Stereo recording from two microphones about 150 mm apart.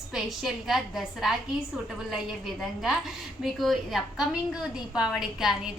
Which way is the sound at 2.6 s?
5° right (ahead or behind).